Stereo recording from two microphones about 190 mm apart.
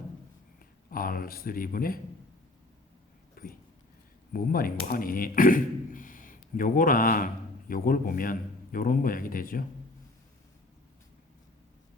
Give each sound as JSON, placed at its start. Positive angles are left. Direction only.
{"t": 0.9, "sound": "a man's voice", "side_deg": 50}
{"t": 3.4, "sound": "a sound", "side_deg": 50}
{"t": 4.3, "sound": "a man's voice", "side_deg": 50}